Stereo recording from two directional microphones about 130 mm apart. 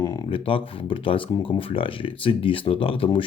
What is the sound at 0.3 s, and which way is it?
Speech, 45° left (ahead or behind).